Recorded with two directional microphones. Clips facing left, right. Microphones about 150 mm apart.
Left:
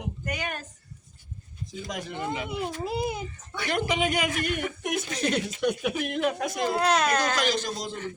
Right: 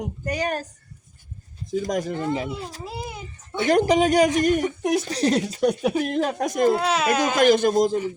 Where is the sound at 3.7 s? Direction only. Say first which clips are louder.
Right 9 dB; 40° right (ahead or behind).